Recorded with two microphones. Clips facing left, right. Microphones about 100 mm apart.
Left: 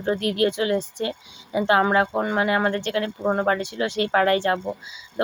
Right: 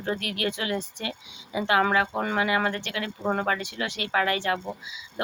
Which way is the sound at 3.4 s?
35° left (ahead or behind).